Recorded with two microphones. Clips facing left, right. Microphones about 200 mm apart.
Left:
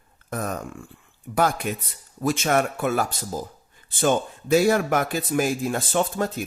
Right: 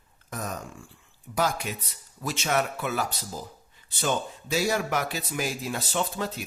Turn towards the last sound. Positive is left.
turn(degrees=50)  # may be behind; listen again after turning